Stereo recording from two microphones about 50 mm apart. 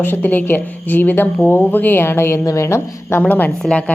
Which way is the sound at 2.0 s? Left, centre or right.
Left.